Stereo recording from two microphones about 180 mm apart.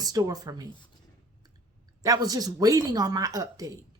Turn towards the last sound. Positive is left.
turn(degrees=-20)  # may be behind; listen again after turning